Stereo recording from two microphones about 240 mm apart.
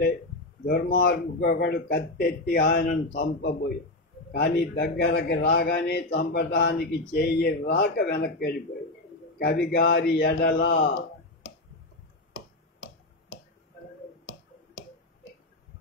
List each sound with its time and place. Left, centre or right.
0.7 s a man's voice: left